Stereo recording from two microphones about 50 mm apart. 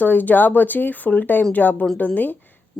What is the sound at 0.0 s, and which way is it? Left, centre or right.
Speech, left.